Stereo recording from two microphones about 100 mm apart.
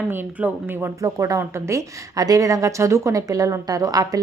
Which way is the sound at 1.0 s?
30° right (ahead or behind).